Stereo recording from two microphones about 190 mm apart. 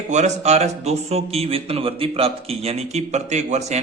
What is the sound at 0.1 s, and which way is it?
Speech, 40° right (ahead or behind).